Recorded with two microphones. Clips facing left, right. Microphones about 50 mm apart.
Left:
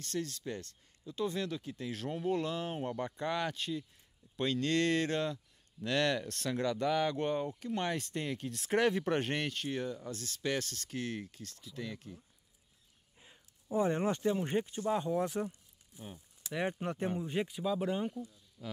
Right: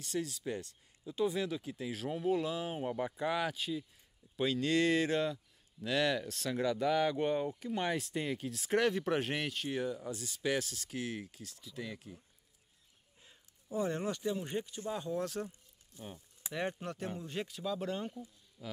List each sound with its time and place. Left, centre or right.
0.0 s speech: centre
13.2 s speech: left
18.6 s speech: centre